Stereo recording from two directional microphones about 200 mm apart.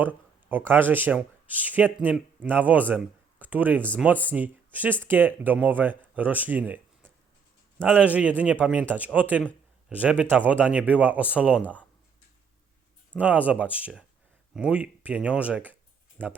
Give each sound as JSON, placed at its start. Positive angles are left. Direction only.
{"t": 0.0, "sound": "speech", "side_deg": -10}
{"t": 13.1, "sound": "speech", "side_deg": -5}